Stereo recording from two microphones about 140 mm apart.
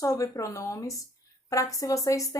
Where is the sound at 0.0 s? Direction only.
25° left (ahead or behind).